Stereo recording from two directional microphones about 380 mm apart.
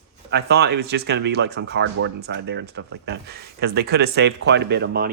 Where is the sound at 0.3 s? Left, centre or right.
Right.